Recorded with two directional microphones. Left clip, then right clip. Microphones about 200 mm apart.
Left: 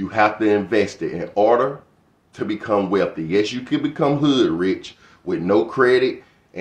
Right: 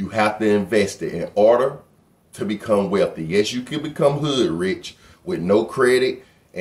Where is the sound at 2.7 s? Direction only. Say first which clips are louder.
Right 1 dB; 5° left (ahead or behind).